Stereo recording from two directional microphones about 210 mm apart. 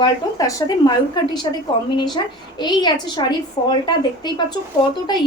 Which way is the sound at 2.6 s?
20° left (ahead or behind).